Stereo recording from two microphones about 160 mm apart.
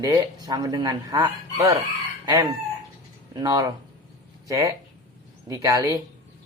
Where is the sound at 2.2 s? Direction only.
20° right (ahead or behind).